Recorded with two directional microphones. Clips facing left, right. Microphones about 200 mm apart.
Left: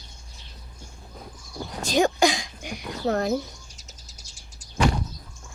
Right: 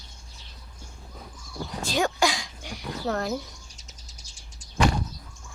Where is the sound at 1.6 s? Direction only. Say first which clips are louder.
Left 4 dB; 15° left (ahead or behind).